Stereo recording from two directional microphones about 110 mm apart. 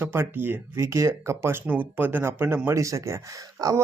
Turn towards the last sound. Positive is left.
turn(degrees=-30)  # may be behind; listen again after turning